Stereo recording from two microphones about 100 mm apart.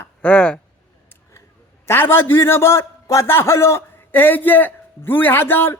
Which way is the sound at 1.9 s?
25° left (ahead or behind).